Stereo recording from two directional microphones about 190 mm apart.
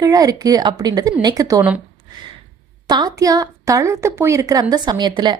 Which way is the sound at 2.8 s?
20° right (ahead or behind).